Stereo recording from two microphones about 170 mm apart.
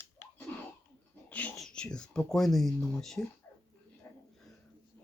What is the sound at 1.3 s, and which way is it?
Speech, 10° left (ahead or behind).